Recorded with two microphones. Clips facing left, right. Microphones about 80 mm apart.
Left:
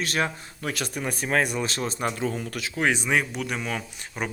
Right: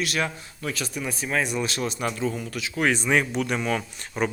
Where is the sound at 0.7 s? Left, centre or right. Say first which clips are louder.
Left 1 dB; left.